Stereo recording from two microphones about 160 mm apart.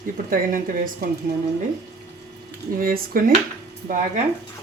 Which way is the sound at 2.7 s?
65° right (ahead or behind).